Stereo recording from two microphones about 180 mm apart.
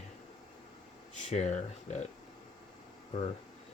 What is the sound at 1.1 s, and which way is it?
Speech, 40° left (ahead or behind).